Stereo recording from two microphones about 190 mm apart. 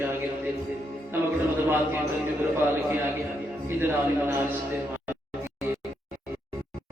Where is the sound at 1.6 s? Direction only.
10° right (ahead or behind).